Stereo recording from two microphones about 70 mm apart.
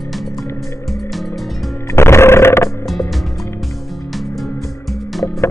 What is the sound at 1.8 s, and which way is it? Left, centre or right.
Music, left.